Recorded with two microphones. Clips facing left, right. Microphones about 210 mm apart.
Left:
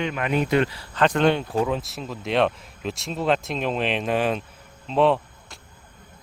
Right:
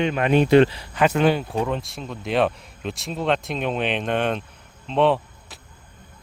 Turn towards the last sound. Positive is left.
turn(degrees=0)  # may be behind; listen again after turning